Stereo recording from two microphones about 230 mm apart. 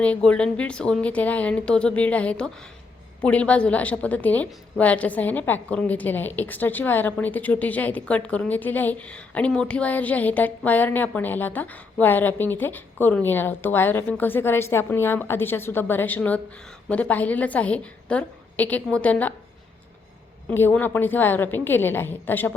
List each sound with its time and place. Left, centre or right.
0.0 s a woman's voice: centre
20.5 s a woman's voice: centre